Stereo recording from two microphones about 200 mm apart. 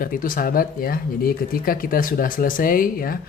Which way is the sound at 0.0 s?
45° left (ahead or behind).